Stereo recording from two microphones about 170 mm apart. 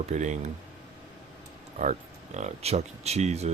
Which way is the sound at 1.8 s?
45° right (ahead or behind).